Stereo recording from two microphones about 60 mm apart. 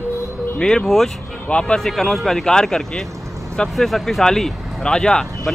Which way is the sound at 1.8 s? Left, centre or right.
Centre.